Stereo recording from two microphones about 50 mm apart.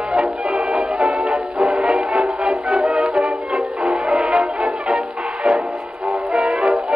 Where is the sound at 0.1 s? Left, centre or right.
Centre.